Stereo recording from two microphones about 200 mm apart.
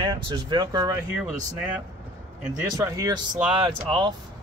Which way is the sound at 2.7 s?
20° right (ahead or behind).